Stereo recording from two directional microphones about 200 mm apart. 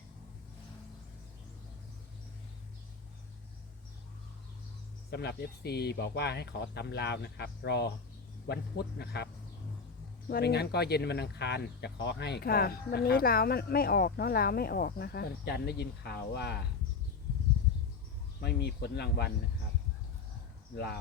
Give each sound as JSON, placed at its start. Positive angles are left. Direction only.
{"t": 5.1, "sound": "speech", "side_deg": 55}
{"t": 18.3, "sound": "speech", "side_deg": 55}
{"t": 20.7, "sound": "speech", "side_deg": 55}